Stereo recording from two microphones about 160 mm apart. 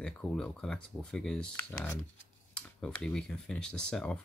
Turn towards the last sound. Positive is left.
turn(degrees=5)  # may be behind; listen again after turning